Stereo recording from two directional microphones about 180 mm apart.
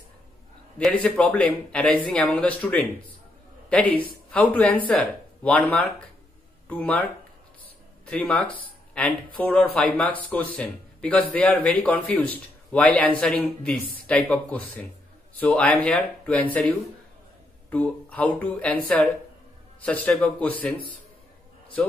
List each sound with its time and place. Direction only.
0.7 s speech: 5° left (ahead or behind)